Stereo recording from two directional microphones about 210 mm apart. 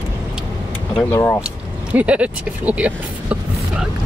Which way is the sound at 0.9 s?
15° left (ahead or behind).